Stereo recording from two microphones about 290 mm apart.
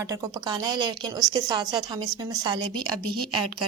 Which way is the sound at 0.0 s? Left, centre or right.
Centre.